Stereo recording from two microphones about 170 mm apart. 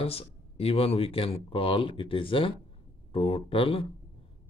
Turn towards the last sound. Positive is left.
turn(degrees=35)  # may be behind; listen again after turning